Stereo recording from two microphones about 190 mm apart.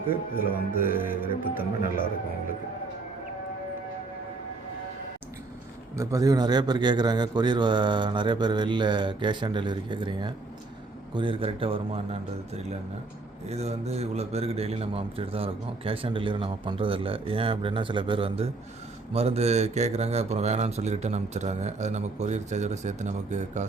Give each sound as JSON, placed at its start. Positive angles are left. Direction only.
{"t": 0.1, "sound": "music", "side_deg": 50}
{"t": 6.0, "sound": "a man's voice", "side_deg": -15}